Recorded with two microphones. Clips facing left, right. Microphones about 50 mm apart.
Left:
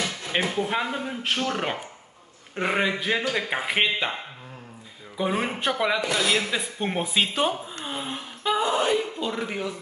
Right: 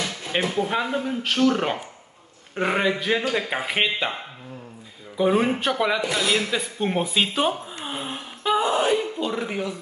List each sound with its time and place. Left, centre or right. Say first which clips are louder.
0.3 s speech: right 2 dB; centre
1.2 s speech: right 7 dB; left
1.5 s speech: right 4 dB; centre
5.1 s speech: right 6 dB; centre
7.7 s a sound: right 1 dB; centre
9.2 s speech: right 2 dB; centre